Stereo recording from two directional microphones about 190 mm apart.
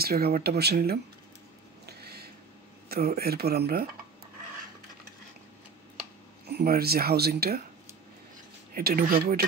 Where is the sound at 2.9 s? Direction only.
55° right (ahead or behind).